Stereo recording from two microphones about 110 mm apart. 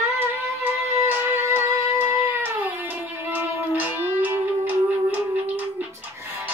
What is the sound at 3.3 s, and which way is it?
Music, 20° right (ahead or behind).